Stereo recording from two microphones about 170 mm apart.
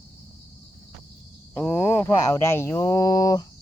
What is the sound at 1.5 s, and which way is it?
Speech, 10° left (ahead or behind).